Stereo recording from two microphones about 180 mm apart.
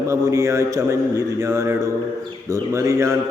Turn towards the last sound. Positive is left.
turn(degrees=-15)  # may be behind; listen again after turning